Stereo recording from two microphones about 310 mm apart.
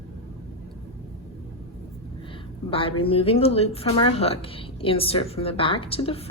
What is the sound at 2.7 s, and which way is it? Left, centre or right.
A woman's voice, centre.